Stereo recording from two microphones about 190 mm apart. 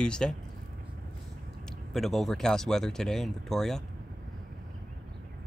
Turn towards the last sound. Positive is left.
turn(degrees=0)  # may be behind; listen again after turning